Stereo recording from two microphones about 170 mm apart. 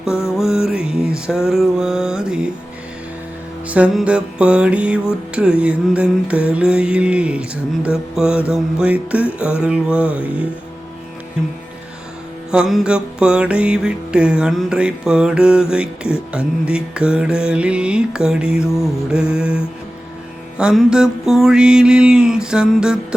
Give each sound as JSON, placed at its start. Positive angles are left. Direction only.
{"t": 0.0, "sound": "music", "side_deg": -5}
{"t": 3.7, "sound": "music", "side_deg": -5}
{"t": 12.5, "sound": "music", "side_deg": -5}